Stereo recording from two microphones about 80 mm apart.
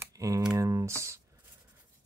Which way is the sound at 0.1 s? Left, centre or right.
Right.